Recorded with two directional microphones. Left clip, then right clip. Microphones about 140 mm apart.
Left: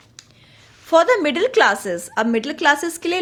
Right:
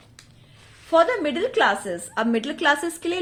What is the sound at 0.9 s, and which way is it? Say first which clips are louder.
A woman's voice: left 4 dB; 50° left (ahead or behind).